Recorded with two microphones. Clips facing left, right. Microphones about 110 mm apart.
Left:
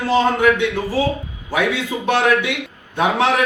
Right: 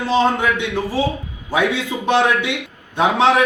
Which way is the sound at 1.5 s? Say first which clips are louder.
Right 1 dB; 25° right (ahead or behind).